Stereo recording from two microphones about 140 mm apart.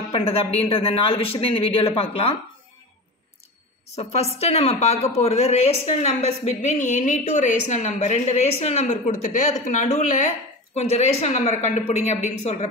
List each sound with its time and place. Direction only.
0.7 s speech: 40° left (ahead or behind)
3.9 s a woman's voice: 50° left (ahead or behind)
10.7 s a woman's voice: 50° left (ahead or behind)